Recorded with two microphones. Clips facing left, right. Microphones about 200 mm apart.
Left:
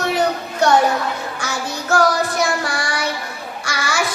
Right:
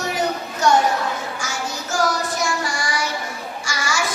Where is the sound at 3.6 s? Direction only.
60° left (ahead or behind).